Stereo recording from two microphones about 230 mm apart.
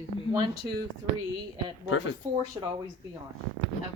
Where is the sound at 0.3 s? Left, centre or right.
Centre.